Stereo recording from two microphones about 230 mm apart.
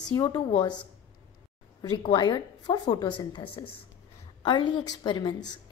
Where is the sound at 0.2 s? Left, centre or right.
Centre.